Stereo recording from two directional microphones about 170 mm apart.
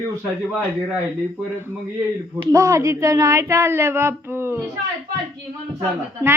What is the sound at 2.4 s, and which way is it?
Speech, 20° right (ahead or behind).